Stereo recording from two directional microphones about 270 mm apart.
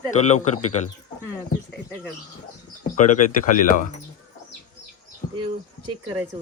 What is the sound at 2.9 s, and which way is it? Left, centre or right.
Speech, left.